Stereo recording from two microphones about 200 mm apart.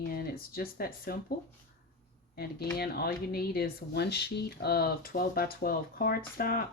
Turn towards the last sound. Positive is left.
turn(degrees=50)  # may be behind; listen again after turning